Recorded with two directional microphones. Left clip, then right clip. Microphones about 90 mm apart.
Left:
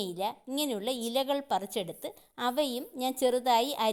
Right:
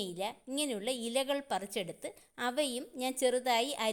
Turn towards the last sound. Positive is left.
turn(degrees=30)  # may be behind; listen again after turning